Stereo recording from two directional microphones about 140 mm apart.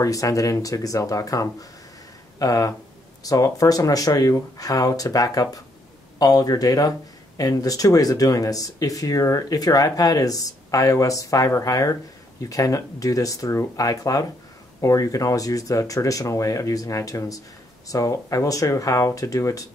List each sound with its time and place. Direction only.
0.0 s speech: 25° left (ahead or behind)